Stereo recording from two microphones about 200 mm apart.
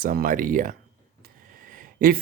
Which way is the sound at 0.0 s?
45° right (ahead or behind).